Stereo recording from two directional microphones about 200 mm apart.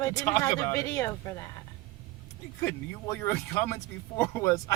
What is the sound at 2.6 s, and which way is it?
Speech, 10° left (ahead or behind).